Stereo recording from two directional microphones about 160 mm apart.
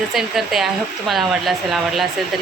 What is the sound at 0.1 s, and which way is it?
Speech, centre (ahead or behind).